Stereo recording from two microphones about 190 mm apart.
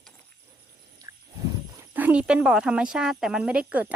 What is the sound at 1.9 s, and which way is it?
Speech, 10° right (ahead or behind).